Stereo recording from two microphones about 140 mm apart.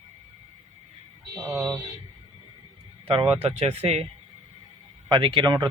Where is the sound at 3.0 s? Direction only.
40° right (ahead or behind).